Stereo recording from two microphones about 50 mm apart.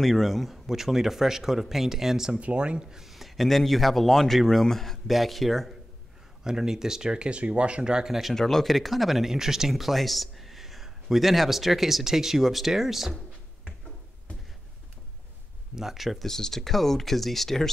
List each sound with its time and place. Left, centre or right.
0.0 s speech: centre
2.4 s speech: right; by 5.8 s centre
6.4 s speech: centre
8.1 s speech: centre
8.4 s speech: centre
15.7 s speech: centre
16.3 s speech: centre